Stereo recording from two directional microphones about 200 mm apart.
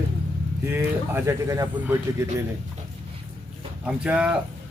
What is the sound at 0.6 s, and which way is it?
Speech, 10° right (ahead or behind).